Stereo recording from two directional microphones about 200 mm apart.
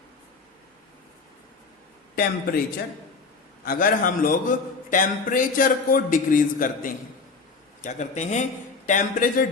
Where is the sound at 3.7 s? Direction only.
45° left (ahead or behind).